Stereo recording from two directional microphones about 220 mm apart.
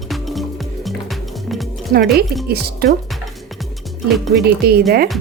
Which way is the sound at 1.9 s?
35° right (ahead or behind).